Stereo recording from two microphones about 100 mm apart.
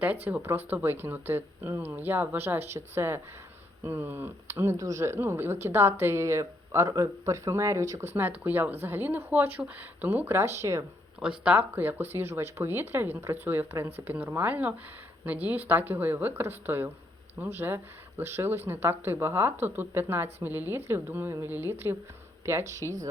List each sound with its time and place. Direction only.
0.3 s speech: 20° right (ahead or behind)
11.2 s speech: 10° right (ahead or behind); by 23.0 s 30° right (ahead or behind)